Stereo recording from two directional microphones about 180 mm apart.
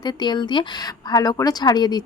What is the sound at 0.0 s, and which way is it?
A woman's voice, 25° left (ahead or behind).